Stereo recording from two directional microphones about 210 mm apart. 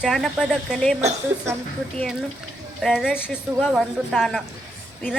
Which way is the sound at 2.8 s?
Centre (ahead or behind).